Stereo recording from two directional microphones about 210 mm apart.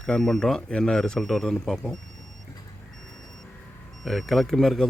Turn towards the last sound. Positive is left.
turn(degrees=0)  # may be behind; listen again after turning